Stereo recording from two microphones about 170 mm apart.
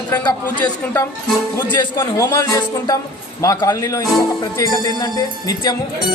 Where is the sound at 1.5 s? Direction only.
20° left (ahead or behind).